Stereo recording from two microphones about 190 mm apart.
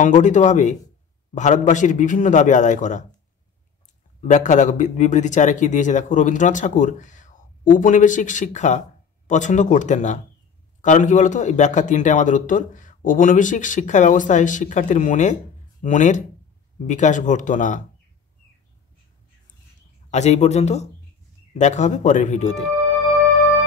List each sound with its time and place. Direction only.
0.0 s speech: 40° left (ahead or behind)
4.2 s speech: 40° left (ahead or behind)
20.1 s speech: 35° left (ahead or behind)